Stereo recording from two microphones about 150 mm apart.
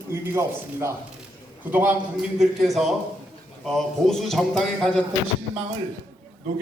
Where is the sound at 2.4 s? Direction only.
Centre (ahead or behind).